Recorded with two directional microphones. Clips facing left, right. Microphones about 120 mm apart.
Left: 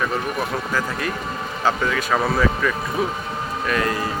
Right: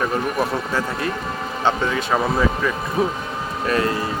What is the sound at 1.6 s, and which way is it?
Speech, 25° right (ahead or behind).